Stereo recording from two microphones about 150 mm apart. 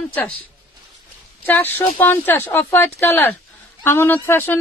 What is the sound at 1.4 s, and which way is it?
Speech, 10° left (ahead or behind).